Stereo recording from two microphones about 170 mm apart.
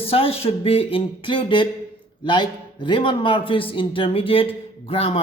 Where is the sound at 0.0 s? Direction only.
35° left (ahead or behind).